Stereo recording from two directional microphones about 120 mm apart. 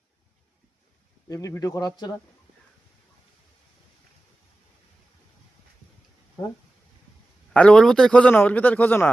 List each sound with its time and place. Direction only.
1.3 s speech: 30° left (ahead or behind)
7.5 s a man's voice: 10° left (ahead or behind)